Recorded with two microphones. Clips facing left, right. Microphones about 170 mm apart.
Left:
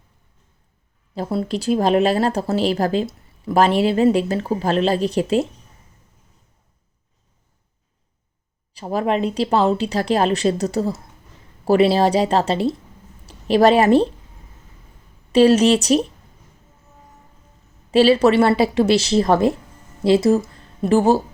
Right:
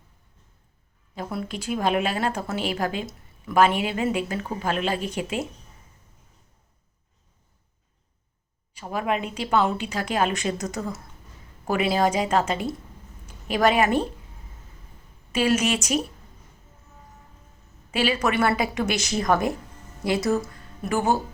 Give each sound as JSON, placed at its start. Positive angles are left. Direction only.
{"t": 1.1, "sound": "speech", "side_deg": 30}
{"t": 8.7, "sound": "a woman's voice", "side_deg": 35}
{"t": 15.3, "sound": "speech", "side_deg": 35}
{"t": 17.9, "sound": "speech", "side_deg": 35}
{"t": 20.5, "sound": "music", "side_deg": 30}